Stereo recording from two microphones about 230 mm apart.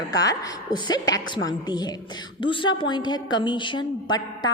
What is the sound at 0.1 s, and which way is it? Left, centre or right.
A woman's voice, centre.